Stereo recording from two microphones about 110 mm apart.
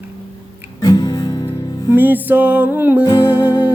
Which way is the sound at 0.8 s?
35° left (ahead or behind).